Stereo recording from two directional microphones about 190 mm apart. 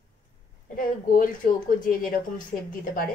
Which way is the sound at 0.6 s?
45° left (ahead or behind).